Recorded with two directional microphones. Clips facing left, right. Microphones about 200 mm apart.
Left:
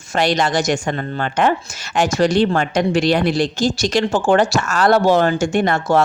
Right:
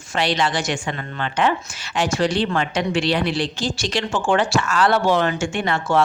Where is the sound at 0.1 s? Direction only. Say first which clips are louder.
Left 4 dB; 45° left (ahead or behind).